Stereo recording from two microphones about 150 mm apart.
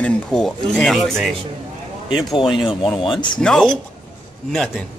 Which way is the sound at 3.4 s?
Centre (ahead or behind).